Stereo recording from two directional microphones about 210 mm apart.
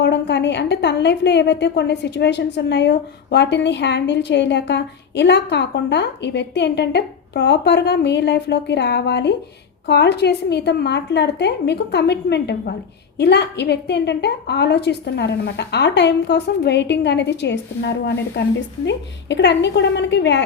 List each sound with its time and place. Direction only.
0.0 s a woman's voice: 55° left (ahead or behind)